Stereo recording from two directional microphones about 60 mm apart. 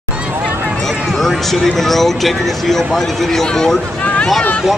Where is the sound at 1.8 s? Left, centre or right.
Centre.